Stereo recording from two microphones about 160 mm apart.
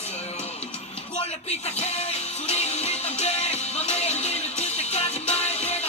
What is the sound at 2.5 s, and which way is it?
Music, 40° left (ahead or behind).